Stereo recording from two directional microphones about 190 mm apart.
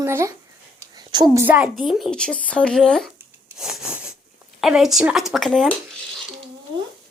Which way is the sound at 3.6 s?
5° right (ahead or behind).